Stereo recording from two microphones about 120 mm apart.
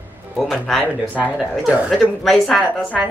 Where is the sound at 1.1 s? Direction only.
10° right (ahead or behind).